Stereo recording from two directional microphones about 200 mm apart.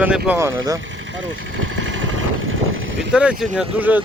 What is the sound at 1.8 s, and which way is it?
Vehicle, 70° right (ahead or behind).